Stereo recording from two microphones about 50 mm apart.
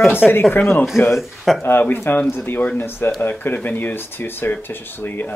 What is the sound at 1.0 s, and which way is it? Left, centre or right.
Speech, left.